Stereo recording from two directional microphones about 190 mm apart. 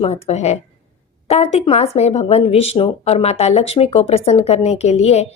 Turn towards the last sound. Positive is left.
turn(degrees=35)  # may be behind; listen again after turning